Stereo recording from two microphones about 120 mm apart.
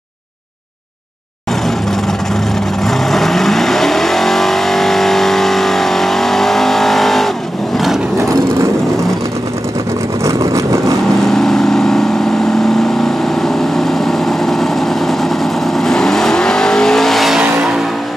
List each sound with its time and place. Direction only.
2.8 s vehicle: centre (ahead or behind)
10.2 s vehicle: 25° right (ahead or behind)
11.2 s vehicle: 5° left (ahead or behind)
13.4 s vehicle: centre (ahead or behind)